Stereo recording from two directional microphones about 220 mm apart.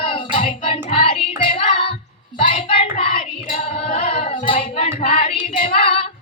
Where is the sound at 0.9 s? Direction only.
25° left (ahead or behind).